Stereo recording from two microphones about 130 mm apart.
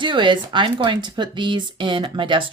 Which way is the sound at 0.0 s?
40° right (ahead or behind).